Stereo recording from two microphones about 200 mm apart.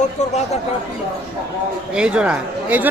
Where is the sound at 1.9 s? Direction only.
5° right (ahead or behind).